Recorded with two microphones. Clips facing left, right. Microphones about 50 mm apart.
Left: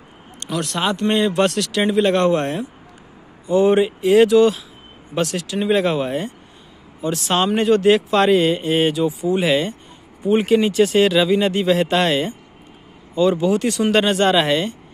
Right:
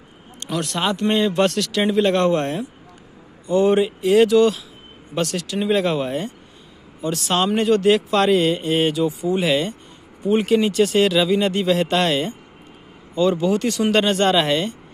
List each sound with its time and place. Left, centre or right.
0.4 s speech: centre
3.4 s speech: centre